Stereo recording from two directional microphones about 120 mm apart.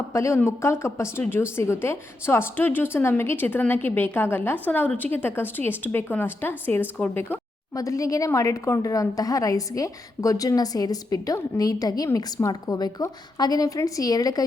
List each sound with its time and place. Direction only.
0.1 s a woman's voice: 25° left (ahead or behind)
7.8 s a woman's voice: 25° left (ahead or behind)